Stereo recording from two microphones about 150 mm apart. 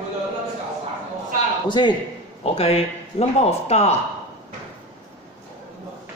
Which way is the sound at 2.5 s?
45° left (ahead or behind).